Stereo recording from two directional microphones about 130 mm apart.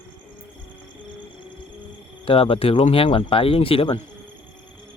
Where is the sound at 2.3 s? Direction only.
45° left (ahead or behind).